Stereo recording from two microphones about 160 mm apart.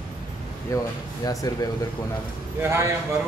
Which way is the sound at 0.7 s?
20° left (ahead or behind).